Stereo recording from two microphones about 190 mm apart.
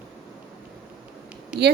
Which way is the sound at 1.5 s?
5° right (ahead or behind).